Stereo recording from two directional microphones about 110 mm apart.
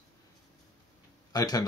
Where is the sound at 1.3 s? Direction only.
35° left (ahead or behind).